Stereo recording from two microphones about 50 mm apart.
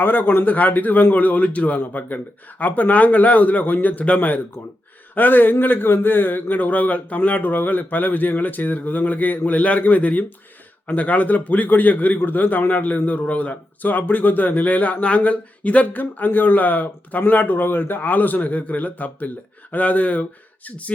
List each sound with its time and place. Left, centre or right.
0.0 s speech: left